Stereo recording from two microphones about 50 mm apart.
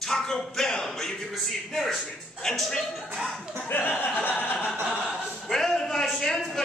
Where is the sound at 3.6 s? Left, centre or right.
Left.